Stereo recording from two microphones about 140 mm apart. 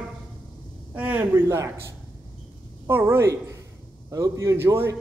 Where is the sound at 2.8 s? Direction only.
20° right (ahead or behind).